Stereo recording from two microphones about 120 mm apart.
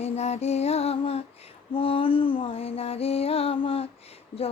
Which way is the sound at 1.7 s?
50° left (ahead or behind).